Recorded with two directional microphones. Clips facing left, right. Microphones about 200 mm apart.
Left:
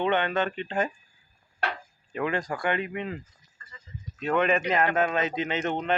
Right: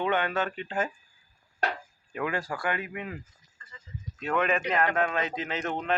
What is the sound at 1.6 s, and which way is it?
Chop, 40° right (ahead or behind).